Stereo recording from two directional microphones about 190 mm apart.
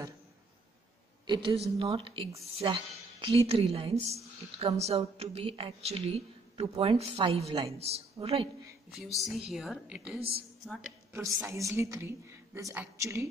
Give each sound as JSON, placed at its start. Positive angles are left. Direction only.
{"t": 1.2, "sound": "a woman's voice", "side_deg": -25}
{"t": 8.9, "sound": "a woman's voice", "side_deg": 0}
{"t": 11.1, "sound": "a woman's voice", "side_deg": -15}